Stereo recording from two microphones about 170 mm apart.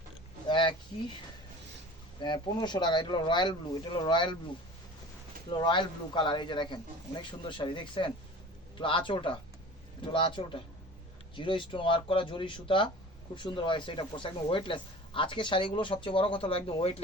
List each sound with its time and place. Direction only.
0.4 s a sound: 30° left (ahead or behind)
2.2 s speech: 25° left (ahead or behind)
5.5 s speech: 25° left (ahead or behind)